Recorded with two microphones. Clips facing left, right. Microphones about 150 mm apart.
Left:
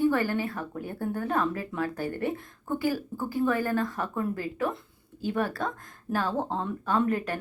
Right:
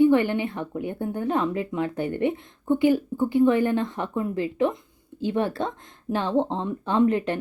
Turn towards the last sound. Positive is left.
turn(degrees=-25)  # may be behind; listen again after turning